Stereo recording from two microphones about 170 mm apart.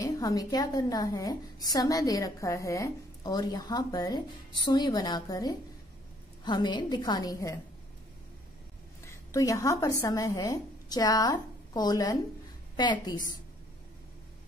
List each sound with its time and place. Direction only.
0.0 s a woman's voice: 20° left (ahead or behind)
9.0 s a woman's voice: 15° left (ahead or behind)